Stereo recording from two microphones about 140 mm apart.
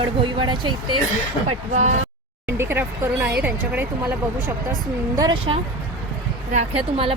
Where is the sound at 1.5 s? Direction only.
55° right (ahead or behind).